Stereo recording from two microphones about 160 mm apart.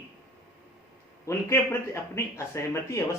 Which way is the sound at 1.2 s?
15° left (ahead or behind).